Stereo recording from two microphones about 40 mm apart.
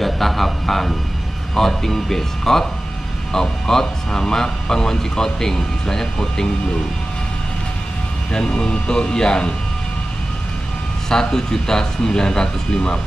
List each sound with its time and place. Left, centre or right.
0.0 s a sound: centre
1.5 s speech: centre
8.3 s speech: centre
11.1 s speech: centre